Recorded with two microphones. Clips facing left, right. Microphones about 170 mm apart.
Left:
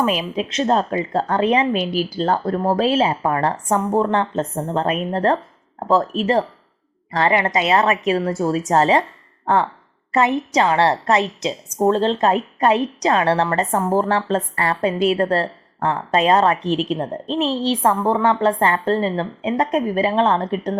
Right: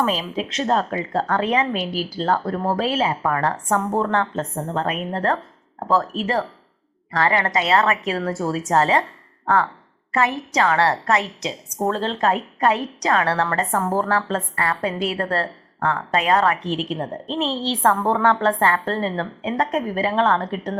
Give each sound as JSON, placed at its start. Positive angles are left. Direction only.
{"t": 0.0, "sound": "a woman's voice", "side_deg": 15}
{"t": 10.1, "sound": "a woman's voice", "side_deg": 20}